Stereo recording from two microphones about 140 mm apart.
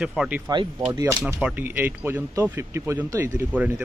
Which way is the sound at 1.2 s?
10° right (ahead or behind).